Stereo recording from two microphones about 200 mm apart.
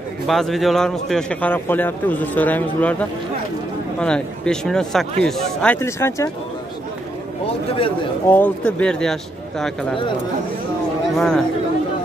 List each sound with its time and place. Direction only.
0.3 s a man's voice: centre (ahead or behind)
8.3 s speech: 10° left (ahead or behind)
11.1 s speech: 5° left (ahead or behind)